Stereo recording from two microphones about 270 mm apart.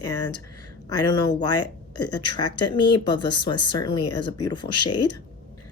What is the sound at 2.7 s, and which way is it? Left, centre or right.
A woman's voice, centre.